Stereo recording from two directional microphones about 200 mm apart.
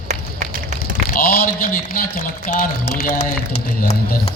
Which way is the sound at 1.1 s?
50° left (ahead or behind).